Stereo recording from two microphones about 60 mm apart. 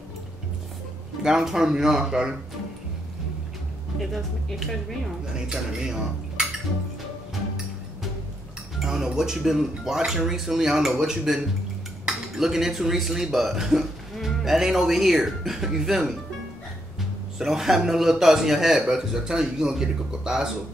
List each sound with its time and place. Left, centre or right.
1.2 s speech: centre
4.0 s a man's voice: centre
5.2 s speech: centre
8.7 s speech: centre
17.4 s a man's voice: centre